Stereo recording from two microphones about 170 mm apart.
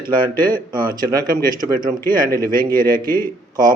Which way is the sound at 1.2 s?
60° right (ahead or behind).